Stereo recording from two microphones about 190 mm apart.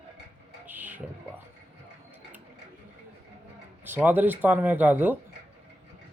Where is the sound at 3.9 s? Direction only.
10° right (ahead or behind).